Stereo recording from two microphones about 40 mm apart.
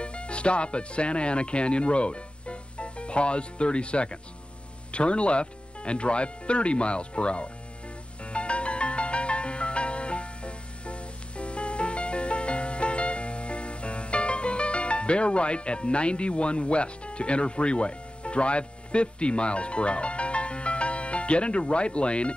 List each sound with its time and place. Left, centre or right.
0.0 s speech: left
8.2 s music: left